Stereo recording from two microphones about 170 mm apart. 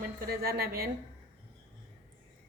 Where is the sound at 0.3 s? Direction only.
65° right (ahead or behind).